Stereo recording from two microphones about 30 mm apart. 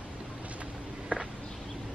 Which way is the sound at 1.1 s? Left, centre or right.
Right.